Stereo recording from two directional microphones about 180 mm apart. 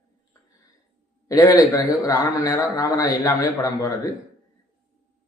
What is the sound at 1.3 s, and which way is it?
A man's voice, 20° left (ahead or behind).